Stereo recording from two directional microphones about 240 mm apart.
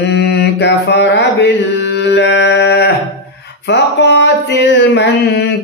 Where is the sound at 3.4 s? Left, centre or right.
Left.